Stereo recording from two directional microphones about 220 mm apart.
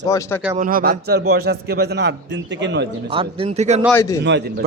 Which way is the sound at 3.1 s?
25° right (ahead or behind).